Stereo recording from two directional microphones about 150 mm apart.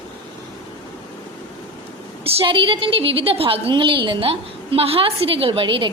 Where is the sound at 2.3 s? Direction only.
40° right (ahead or behind).